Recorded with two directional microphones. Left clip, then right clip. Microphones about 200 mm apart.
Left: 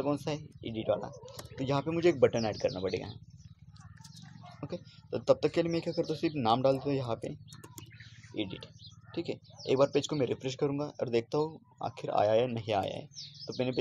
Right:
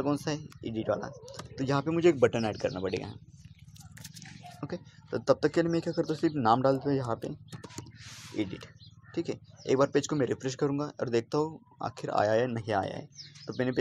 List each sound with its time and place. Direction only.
0.0 s speech: 20° right (ahead or behind)
4.6 s speech: 20° right (ahead or behind)
9.1 s speech: 25° right (ahead or behind)